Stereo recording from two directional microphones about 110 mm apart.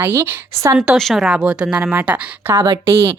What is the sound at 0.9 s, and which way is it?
A woman's voice, centre (ahead or behind).